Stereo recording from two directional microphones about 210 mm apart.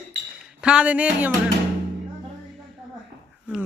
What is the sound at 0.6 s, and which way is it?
Speech, 5° right (ahead or behind).